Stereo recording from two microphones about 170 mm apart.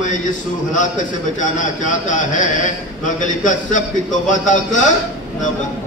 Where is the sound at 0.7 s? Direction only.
45° left (ahead or behind).